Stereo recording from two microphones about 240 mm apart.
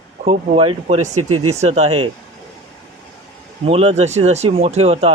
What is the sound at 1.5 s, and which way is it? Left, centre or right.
Speech, right.